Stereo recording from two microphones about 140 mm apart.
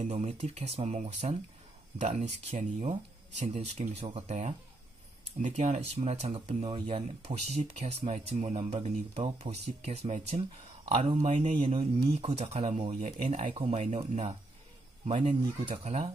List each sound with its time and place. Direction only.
0.0 s speech: 60° right (ahead or behind); by 11.1 s 45° right (ahead or behind)
11.1 s speech: 55° right (ahead or behind)
13.6 s speech: 45° right (ahead or behind)
13.8 s speech: 55° right (ahead or behind)
15.8 s speech: 55° right (ahead or behind)